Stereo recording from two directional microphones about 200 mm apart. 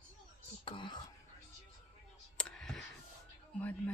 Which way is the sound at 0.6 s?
25° left (ahead or behind).